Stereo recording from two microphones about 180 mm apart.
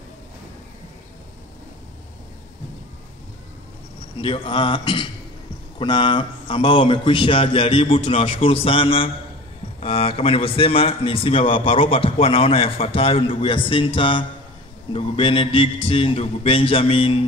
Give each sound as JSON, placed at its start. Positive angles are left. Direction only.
{"t": 4.2, "sound": "a man's voice", "side_deg": 30}